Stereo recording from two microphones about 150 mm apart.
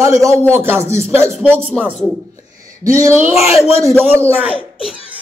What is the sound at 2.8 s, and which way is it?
A woman's voice, 20° right (ahead or behind).